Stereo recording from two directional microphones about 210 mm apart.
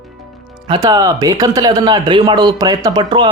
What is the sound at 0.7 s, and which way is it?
Speech, 20° right (ahead or behind).